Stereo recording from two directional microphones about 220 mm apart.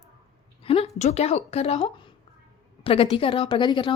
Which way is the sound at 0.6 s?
25° left (ahead or behind).